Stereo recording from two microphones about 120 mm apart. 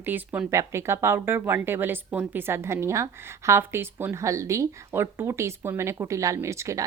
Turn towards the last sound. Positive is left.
turn(degrees=-25)  # may be behind; listen again after turning